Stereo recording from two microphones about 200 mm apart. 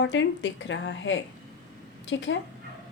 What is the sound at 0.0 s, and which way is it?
A woman's voice, 65° left (ahead or behind).